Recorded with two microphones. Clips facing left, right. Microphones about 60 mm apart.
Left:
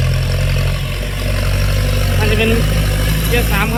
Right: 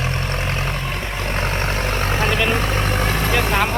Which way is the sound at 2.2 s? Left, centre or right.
Centre.